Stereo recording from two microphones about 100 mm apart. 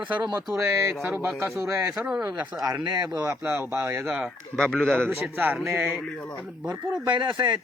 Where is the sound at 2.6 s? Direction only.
35° right (ahead or behind).